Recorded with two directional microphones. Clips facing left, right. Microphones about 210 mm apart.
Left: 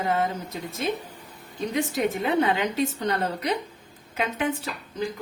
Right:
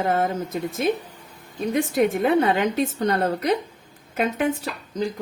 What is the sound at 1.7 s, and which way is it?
A woman's voice, 55° right (ahead or behind).